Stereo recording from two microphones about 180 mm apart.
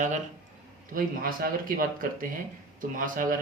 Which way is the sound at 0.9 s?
50° right (ahead or behind).